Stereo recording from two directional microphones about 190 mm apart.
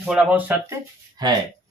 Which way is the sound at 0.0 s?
5° right (ahead or behind).